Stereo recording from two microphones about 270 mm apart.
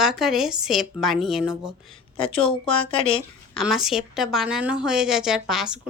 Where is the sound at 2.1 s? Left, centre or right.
Centre.